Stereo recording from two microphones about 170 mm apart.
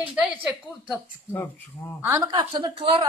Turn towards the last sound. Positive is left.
turn(degrees=-30)  # may be behind; listen again after turning